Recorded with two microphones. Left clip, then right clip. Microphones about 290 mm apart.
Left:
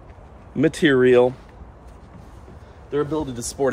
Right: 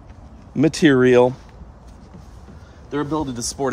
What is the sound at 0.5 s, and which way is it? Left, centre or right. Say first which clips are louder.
Speech: right 2 dB; centre.